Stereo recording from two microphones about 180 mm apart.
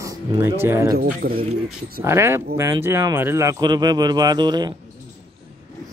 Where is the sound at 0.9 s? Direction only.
55° right (ahead or behind).